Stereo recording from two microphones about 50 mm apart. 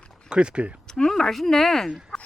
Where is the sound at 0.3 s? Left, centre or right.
Centre.